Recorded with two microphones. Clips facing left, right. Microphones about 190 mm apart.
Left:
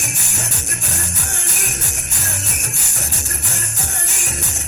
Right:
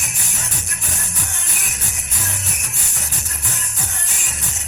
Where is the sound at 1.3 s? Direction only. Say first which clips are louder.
Left 5 dB; 45° left (ahead or behind).